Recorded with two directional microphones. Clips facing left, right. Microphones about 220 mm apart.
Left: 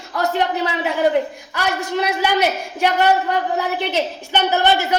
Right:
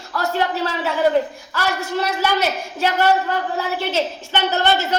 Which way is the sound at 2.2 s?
15° left (ahead or behind).